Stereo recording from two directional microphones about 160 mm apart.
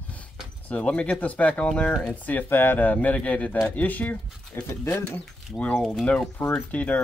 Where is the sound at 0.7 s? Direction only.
5° left (ahead or behind).